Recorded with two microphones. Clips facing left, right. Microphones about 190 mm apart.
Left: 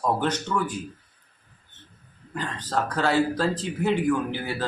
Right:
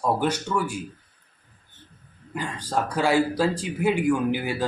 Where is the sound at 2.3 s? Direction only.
10° right (ahead or behind).